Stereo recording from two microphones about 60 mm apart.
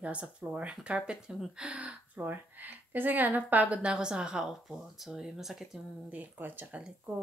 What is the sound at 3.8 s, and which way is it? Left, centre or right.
Speech, centre.